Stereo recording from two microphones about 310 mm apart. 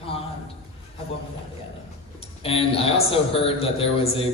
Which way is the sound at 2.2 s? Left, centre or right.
Centre.